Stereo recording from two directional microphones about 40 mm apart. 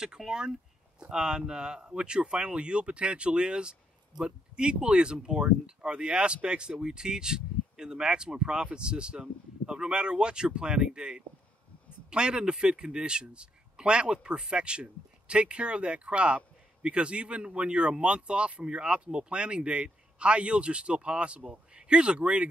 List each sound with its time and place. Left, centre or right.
0.0 s speech: centre